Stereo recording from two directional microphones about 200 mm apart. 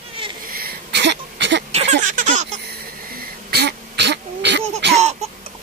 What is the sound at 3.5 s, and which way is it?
Throat clearing, 55° right (ahead or behind).